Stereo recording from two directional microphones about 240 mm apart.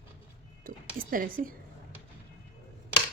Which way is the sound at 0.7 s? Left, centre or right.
Right.